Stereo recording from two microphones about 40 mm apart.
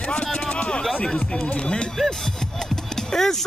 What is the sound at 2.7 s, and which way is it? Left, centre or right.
Music, centre.